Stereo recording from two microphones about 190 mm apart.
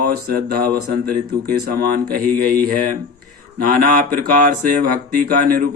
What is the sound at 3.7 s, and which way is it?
Speech, 50° right (ahead or behind).